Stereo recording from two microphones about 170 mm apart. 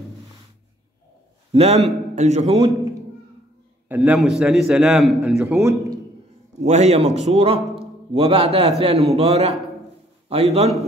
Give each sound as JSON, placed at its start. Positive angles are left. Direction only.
{"t": 1.5, "sound": "a man's voice", "side_deg": -35}
{"t": 3.9, "sound": "a man's voice", "side_deg": -10}
{"t": 5.4, "sound": "a man's voice", "side_deg": -15}
{"t": 6.6, "sound": "a man's voice", "side_deg": -40}